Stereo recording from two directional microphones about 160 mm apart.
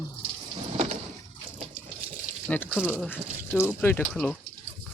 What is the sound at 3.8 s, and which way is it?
Speech, 10° left (ahead or behind).